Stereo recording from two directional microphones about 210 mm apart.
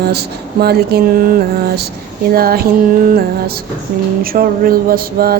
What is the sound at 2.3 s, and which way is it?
Speech, 45° right (ahead or behind).